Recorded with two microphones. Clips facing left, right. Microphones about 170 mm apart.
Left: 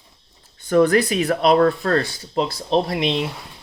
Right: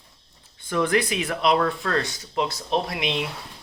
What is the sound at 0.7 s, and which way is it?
Speech, 40° left (ahead or behind).